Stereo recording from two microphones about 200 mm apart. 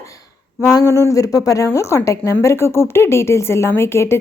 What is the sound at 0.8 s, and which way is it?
Speech, 15° left (ahead or behind).